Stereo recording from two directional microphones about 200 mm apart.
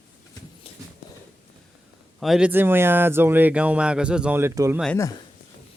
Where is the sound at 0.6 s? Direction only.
30° left (ahead or behind).